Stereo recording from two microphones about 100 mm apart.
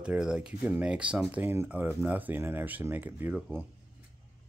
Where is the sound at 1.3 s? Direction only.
20° right (ahead or behind).